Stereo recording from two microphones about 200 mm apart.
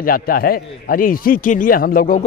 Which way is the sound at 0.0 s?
45° left (ahead or behind).